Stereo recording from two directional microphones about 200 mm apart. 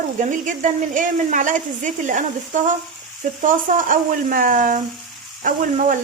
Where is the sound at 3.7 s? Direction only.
40° right (ahead or behind).